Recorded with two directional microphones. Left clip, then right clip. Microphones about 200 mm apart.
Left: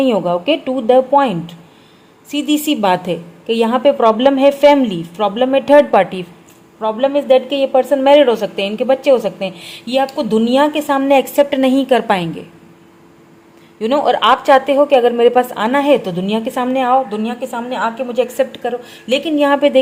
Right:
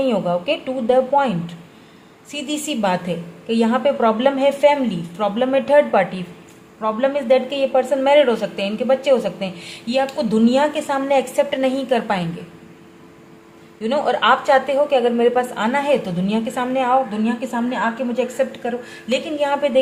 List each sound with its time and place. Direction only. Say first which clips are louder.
0.0 s a woman's voice: left 5 dB; 35° left (ahead or behind)
13.8 s a woman's voice: left 4 dB; 35° left (ahead or behind)